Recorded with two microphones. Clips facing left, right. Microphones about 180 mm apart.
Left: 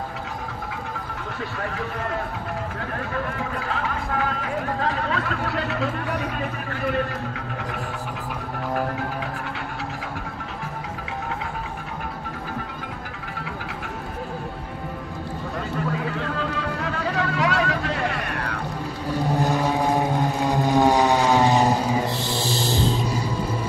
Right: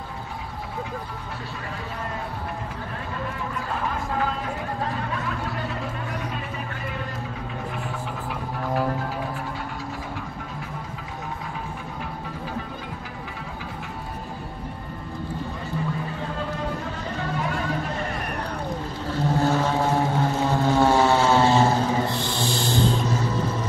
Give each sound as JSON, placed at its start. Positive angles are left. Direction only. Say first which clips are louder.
{"t": 3.3, "sound": "speech", "louder": "left 2 dB", "side_deg": 70}
{"t": 4.7, "sound": "speech", "louder": "left 4 dB", "side_deg": 85}
{"t": 15.9, "sound": "a sound", "louder": "left 3 dB", "side_deg": 80}
{"t": 19.3, "sound": "vehicle", "louder": "right 1 dB", "side_deg": 15}
{"t": 22.1, "sound": "a sound", "louder": "even", "side_deg": 0}
{"t": 23.0, "sound": "vehicle", "louder": "right 1 dB", "side_deg": 10}